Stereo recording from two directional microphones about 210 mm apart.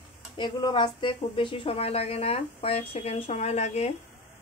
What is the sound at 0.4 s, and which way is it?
A woman's voice, 20° left (ahead or behind).